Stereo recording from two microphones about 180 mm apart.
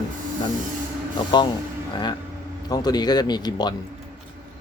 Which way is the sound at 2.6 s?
20° left (ahead or behind).